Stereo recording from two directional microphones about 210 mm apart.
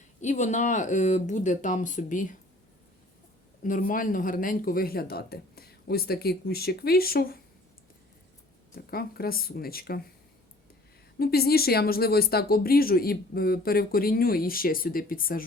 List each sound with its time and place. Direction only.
0.2 s speech: 35° left (ahead or behind)
3.6 s speech: 40° left (ahead or behind)
8.7 s speech: 45° left (ahead or behind)
11.2 s speech: 45° left (ahead or behind)